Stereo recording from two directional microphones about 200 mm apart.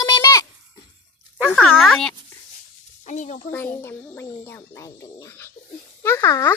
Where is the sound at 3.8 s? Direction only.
5° left (ahead or behind).